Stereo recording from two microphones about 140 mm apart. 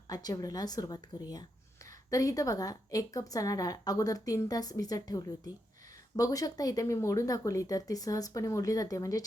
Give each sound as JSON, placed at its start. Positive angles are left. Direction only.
{"t": 0.1, "sound": "speech", "side_deg": 25}